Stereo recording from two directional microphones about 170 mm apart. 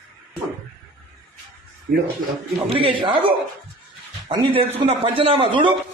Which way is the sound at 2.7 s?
30° right (ahead or behind).